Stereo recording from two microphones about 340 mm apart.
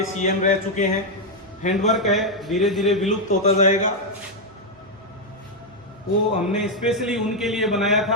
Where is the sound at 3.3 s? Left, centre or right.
Centre.